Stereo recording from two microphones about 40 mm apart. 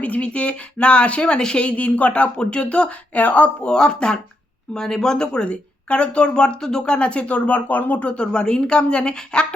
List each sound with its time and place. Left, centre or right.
0.0 s speech: left
1.6 s speech: left
3.2 s speech: left
3.7 s speech: left